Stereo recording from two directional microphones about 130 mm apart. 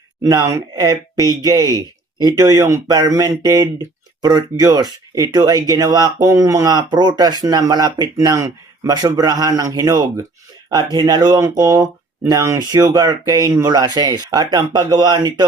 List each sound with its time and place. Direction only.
0.3 s speech: 25° right (ahead or behind)